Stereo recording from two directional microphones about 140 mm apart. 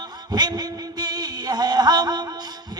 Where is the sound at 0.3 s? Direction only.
30° right (ahead or behind).